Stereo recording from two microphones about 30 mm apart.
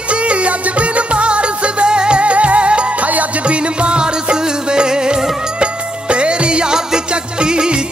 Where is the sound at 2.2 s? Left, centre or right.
Right.